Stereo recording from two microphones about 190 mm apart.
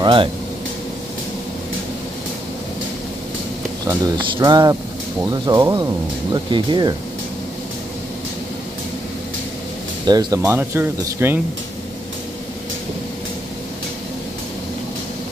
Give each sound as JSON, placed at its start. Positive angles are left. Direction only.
{"t": 0.0, "sound": "speech", "side_deg": -25}
{"t": 3.8, "sound": "speech", "side_deg": -20}
{"t": 10.0, "sound": "speech", "side_deg": -20}